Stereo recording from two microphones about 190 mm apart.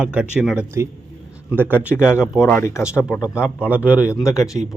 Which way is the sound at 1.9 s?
10° left (ahead or behind).